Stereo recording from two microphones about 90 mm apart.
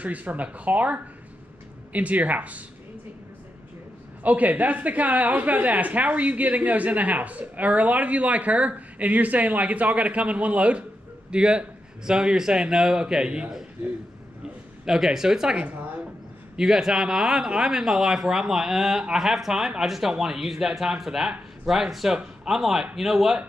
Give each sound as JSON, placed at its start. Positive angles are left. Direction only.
{"t": 0.0, "sound": "a woman's voice", "side_deg": -15}
{"t": 4.2, "sound": "a woman's voice", "side_deg": -15}
{"t": 14.4, "sound": "a sound", "side_deg": -5}
{"t": 16.5, "sound": "speech", "side_deg": -5}